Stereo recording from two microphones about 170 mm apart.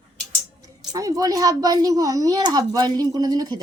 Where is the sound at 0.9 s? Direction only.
20° right (ahead or behind).